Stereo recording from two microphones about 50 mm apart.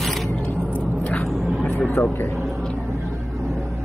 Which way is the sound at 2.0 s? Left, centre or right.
Left.